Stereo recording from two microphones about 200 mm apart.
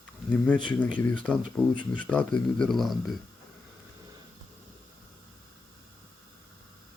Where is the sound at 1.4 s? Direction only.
40° right (ahead or behind).